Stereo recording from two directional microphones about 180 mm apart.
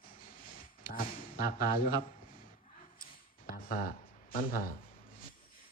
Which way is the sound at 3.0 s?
55° left (ahead or behind).